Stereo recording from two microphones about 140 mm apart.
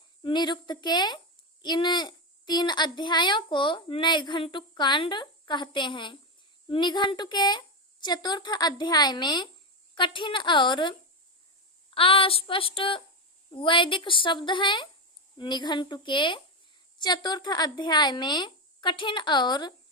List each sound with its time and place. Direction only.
0.2 s a child's voice: 35° left (ahead or behind)
11.9 s a child's voice: 40° left (ahead or behind)